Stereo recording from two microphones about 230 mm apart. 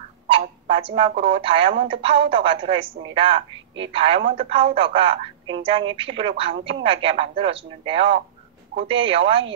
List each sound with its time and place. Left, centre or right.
0.3 s a woman's voice: right